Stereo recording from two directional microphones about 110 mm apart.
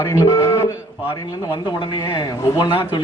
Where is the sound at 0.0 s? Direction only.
25° left (ahead or behind).